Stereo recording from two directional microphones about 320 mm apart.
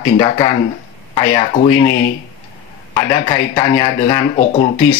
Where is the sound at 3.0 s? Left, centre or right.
Centre.